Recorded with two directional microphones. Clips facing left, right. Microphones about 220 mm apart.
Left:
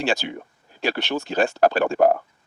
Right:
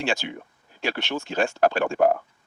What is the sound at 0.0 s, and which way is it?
Speech, 35° left (ahead or behind).